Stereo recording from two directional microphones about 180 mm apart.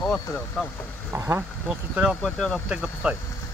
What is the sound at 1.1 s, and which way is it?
Speech, 10° right (ahead or behind).